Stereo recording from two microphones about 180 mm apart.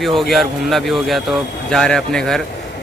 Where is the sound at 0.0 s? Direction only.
Centre (ahead or behind).